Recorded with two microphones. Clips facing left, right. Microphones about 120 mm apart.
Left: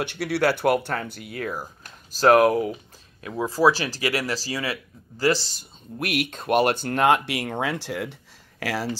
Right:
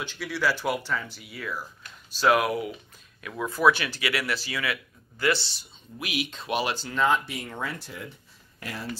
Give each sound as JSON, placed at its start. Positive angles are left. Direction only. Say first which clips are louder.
{"t": 0.0, "sound": "speech", "louder": "left 6 dB", "side_deg": 65}